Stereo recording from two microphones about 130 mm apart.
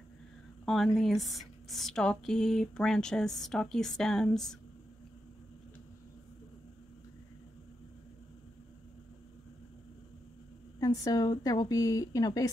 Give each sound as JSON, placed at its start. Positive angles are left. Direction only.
{"t": 0.7, "sound": "speech", "side_deg": 0}
{"t": 10.8, "sound": "a woman's voice", "side_deg": 30}